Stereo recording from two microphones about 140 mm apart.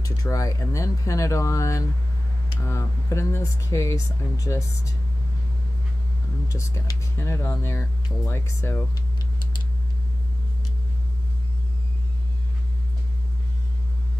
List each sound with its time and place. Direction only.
0.0 s speech: 25° left (ahead or behind)
6.5 s speech: 20° left (ahead or behind)